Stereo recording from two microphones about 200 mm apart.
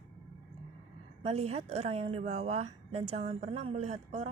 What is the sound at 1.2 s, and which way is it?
A woman's voice, 30° right (ahead or behind).